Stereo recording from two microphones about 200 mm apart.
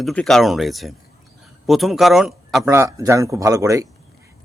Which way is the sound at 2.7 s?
15° right (ahead or behind).